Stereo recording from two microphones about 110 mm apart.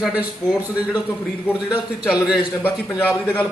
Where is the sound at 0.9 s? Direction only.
15° left (ahead or behind).